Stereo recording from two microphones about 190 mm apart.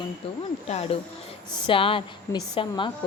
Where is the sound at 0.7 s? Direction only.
35° left (ahead or behind).